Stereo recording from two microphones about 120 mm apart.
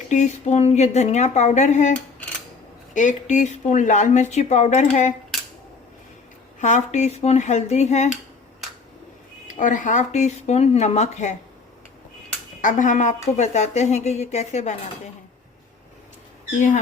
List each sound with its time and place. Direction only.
0.1 s a woman's voice: 85° left
2.9 s speech: 90° left
6.6 s a woman's voice: 85° left; by 8.1 s 70° left (ahead or behind)
9.5 s a woman's voice: 90° left
12.6 s a woman's voice: 90° left; by 14.8 s 75° left (ahead or behind)